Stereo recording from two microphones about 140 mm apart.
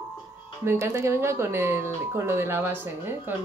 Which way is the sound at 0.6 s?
20° right (ahead or behind).